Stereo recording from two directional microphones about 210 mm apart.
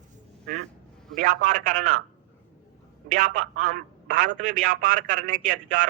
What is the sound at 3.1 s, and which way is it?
Speech, 40° right (ahead or behind).